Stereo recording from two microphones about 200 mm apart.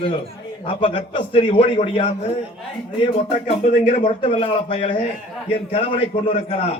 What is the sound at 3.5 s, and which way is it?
A man's voice, 30° left (ahead or behind).